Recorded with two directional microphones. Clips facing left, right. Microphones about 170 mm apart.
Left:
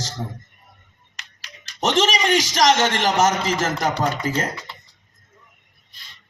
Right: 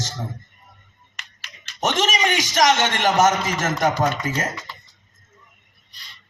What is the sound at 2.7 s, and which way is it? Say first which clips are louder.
A man's voice: even; 35° left (ahead or behind).